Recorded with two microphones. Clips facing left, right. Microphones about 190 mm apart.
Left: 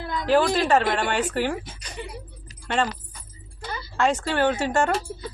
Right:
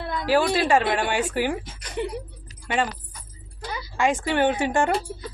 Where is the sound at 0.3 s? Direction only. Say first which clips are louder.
Left 1 dB; 10° right (ahead or behind).